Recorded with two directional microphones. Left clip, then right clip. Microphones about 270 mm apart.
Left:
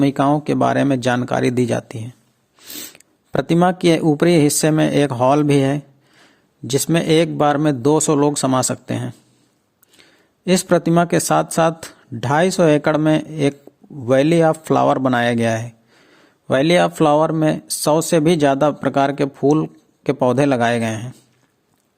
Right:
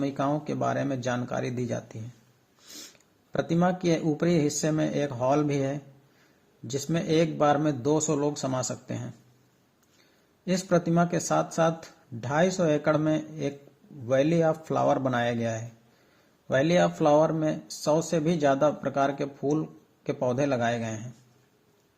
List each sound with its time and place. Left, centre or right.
0.0 s speech: left
3.3 s speech: left